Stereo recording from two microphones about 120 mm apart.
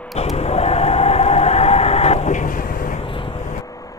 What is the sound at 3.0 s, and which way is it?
Vehicle, 45° left (ahead or behind).